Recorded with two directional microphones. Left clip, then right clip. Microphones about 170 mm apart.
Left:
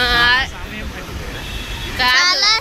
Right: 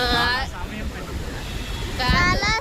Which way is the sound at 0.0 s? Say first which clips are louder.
Left 7 dB; 10° right (ahead or behind).